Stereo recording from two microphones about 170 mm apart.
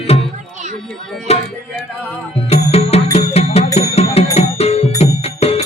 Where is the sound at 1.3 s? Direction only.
40° left (ahead or behind).